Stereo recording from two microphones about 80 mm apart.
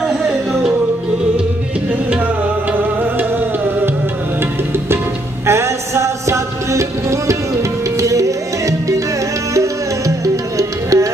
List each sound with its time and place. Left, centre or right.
0.0 s music: centre
2.7 s music: right
5.5 s music: right